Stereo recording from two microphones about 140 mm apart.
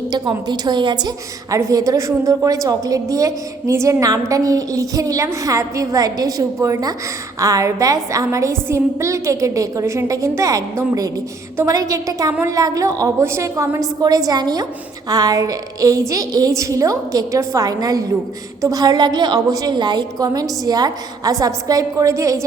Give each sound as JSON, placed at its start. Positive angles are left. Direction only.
{"t": 0.1, "sound": "a woman's voice", "side_deg": -30}